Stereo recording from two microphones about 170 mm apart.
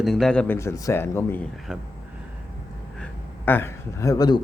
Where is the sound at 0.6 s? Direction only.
20° left (ahead or behind).